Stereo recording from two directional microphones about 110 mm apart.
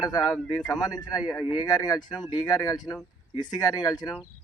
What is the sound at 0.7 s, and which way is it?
Speech, 35° left (ahead or behind).